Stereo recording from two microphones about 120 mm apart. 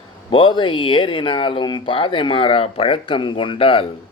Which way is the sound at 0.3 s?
45° left (ahead or behind).